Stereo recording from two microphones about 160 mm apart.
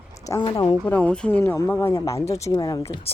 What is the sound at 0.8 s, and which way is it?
Speech, 10° left (ahead or behind).